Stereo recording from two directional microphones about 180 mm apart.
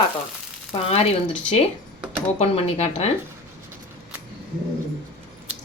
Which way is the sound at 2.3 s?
35° left (ahead or behind).